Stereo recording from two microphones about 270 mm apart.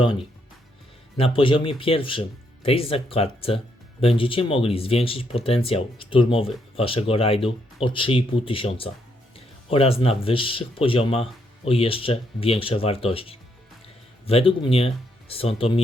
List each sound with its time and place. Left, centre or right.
0.0 s speech: centre